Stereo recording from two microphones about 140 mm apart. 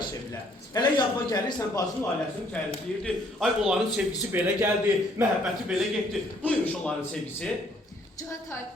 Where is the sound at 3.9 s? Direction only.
15° right (ahead or behind).